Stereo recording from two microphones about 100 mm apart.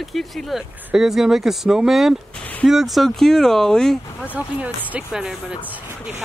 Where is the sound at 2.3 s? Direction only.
15° left (ahead or behind).